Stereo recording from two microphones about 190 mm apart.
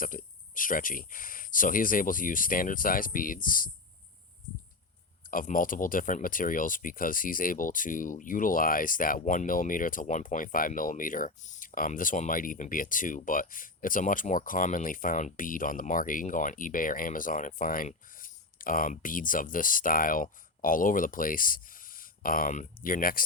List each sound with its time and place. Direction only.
0.1 s speech: 45° left (ahead or behind)
5.3 s speech: 45° left (ahead or behind)